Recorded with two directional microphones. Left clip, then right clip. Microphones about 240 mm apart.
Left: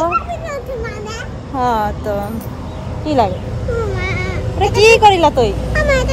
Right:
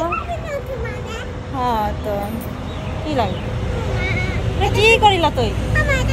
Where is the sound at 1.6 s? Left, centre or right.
Centre.